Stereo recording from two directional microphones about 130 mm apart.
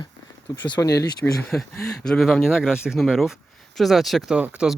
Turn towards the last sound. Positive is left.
turn(degrees=-10)  # may be behind; listen again after turning